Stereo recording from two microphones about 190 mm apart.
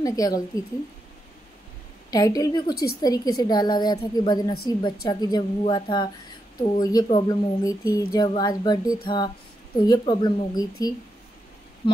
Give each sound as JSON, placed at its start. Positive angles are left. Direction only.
{"t": 0.0, "sound": "a woman's voice", "side_deg": 20}
{"t": 2.0, "sound": "a woman's voice", "side_deg": 20}